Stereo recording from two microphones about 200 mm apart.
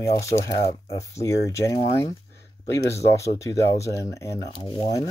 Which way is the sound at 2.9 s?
15° left (ahead or behind).